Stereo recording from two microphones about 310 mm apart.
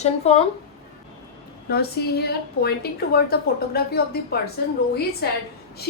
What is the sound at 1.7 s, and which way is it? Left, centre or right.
A woman's voice, left.